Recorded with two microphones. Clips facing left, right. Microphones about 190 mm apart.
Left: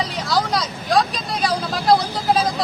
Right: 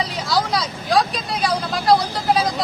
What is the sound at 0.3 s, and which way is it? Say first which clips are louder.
Vehicle: even; centre (ahead or behind).